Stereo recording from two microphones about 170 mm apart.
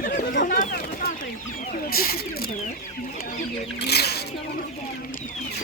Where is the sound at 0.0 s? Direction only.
50° left (ahead or behind).